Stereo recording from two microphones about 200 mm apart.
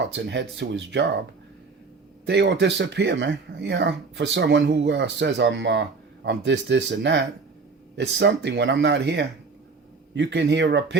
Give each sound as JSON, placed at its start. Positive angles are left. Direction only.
{"t": 0.0, "sound": "speech", "side_deg": -60}
{"t": 2.2, "sound": "speech", "side_deg": -55}